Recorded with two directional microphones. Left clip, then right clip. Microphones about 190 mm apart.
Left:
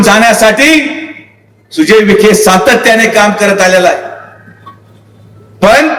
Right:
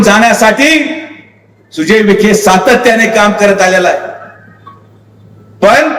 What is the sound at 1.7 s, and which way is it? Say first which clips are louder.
A man's voice: left 2 dB; 30° left (ahead or behind).